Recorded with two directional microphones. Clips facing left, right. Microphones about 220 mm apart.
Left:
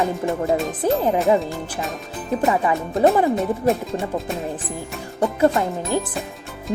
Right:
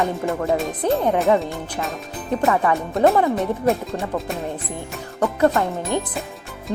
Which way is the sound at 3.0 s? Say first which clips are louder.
Left 1 dB; centre (ahead or behind).